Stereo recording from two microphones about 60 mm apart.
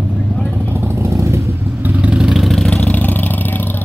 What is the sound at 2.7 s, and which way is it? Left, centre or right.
Vehicle, centre.